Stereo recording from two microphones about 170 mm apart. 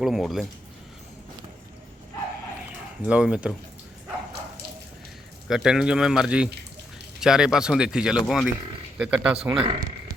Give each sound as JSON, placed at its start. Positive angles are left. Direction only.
{"t": 0.0, "sound": "speech", "side_deg": 0}
{"t": 3.1, "sound": "speech", "side_deg": -5}
{"t": 5.5, "sound": "speech", "side_deg": -5}
{"t": 9.5, "sound": "speech", "side_deg": -30}